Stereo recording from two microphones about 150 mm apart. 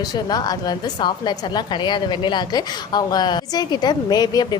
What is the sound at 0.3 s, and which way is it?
A woman's voice, 25° left (ahead or behind).